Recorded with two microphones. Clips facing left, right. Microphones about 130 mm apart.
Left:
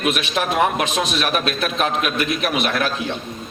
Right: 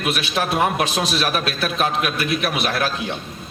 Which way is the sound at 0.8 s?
30° right (ahead or behind).